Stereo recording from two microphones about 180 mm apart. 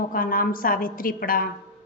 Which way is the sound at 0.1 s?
50° left (ahead or behind).